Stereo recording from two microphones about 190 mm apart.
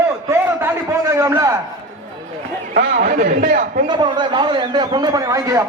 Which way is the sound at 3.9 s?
25° right (ahead or behind).